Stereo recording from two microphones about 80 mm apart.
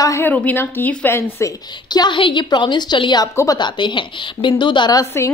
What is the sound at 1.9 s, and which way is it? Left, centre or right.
A woman's voice, left.